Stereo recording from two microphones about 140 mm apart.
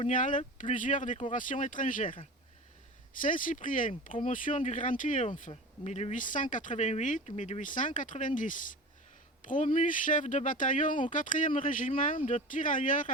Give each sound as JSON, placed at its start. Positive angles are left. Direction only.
{"t": 0.1, "sound": "speech", "side_deg": 70}
{"t": 3.2, "sound": "speech", "side_deg": 75}
{"t": 5.5, "sound": "speech", "side_deg": 50}